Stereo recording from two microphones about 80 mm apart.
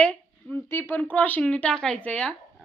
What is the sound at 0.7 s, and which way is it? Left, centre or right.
Music, left.